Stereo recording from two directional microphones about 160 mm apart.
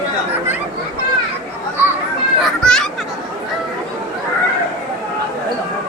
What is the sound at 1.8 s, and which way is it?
Children playing, 15° right (ahead or behind).